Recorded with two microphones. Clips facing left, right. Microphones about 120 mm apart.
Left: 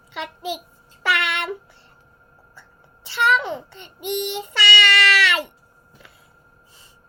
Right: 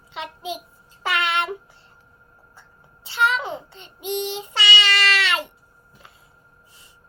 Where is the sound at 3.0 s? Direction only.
65° left (ahead or behind).